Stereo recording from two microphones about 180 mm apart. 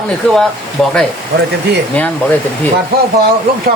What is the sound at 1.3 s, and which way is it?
Speech, 65° right (ahead or behind).